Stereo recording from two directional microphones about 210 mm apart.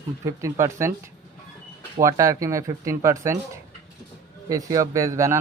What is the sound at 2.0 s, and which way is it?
Speech, 15° right (ahead or behind).